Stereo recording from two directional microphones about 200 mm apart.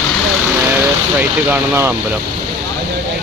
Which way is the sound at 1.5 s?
10° right (ahead or behind).